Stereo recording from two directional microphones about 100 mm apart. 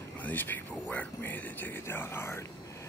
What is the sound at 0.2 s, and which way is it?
Speech, 20° left (ahead or behind).